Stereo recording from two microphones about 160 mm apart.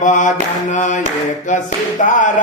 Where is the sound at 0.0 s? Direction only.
50° left (ahead or behind).